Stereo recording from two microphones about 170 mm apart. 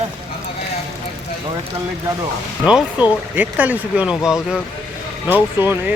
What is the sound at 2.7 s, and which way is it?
Speech, 5° right (ahead or behind).